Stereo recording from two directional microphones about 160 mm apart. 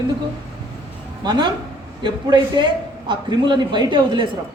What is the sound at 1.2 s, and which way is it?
A man's voice, 25° right (ahead or behind).